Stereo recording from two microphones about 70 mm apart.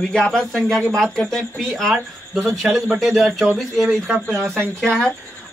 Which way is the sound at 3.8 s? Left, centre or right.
Centre.